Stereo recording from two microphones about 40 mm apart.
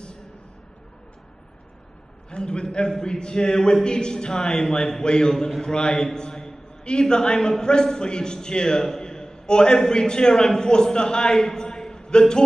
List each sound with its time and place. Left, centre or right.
2.3 s a man's voice: left